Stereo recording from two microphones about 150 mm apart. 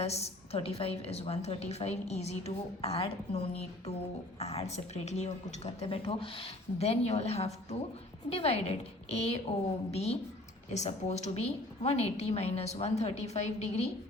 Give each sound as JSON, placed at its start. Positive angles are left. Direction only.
{"t": 0.0, "sound": "a woman's voice", "side_deg": 45}